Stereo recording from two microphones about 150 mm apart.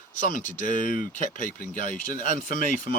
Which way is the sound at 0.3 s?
60° left (ahead or behind).